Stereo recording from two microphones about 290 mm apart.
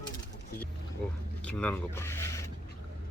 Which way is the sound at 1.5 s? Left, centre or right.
Centre.